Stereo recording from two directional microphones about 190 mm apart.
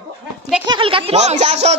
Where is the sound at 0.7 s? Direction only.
25° right (ahead or behind).